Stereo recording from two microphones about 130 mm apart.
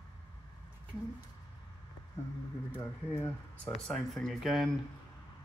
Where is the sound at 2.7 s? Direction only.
15° left (ahead or behind).